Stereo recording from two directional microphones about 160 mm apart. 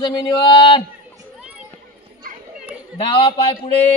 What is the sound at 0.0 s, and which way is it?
Speech, 25° left (ahead or behind).